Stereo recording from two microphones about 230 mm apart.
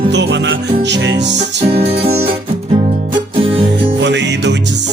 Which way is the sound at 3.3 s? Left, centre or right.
Right.